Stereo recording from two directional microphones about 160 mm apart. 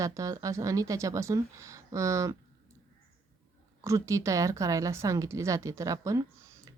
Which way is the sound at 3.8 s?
20° right (ahead or behind).